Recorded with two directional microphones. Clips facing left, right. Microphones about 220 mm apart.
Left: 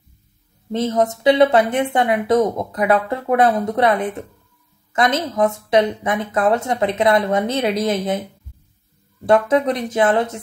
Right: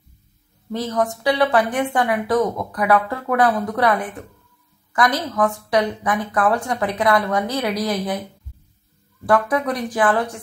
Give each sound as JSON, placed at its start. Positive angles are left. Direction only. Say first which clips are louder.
{"t": 0.7, "sound": "speech", "louder": "left 4 dB", "side_deg": 25}
{"t": 9.2, "sound": "speech", "louder": "left 4 dB", "side_deg": 25}